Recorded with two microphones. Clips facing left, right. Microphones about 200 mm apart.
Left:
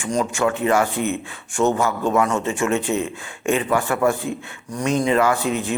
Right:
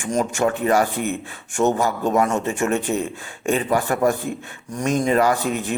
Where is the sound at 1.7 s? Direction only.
40° right (ahead or behind).